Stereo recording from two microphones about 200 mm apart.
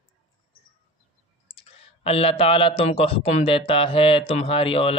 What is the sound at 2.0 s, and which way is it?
A man's voice, 30° left (ahead or behind).